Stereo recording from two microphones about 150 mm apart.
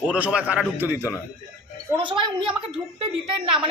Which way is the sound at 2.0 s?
35° right (ahead or behind).